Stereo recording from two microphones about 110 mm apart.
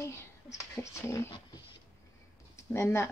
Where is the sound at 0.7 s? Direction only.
25° left (ahead or behind).